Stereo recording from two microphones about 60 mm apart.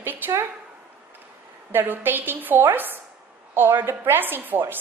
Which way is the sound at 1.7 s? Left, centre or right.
Right.